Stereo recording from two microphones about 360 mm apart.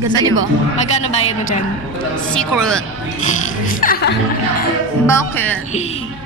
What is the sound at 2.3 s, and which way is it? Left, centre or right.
Speech, centre.